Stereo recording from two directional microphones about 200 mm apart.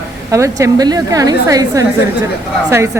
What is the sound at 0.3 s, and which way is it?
A woman's voice, 15° right (ahead or behind).